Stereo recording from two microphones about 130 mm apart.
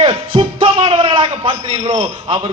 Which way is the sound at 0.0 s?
40° right (ahead or behind).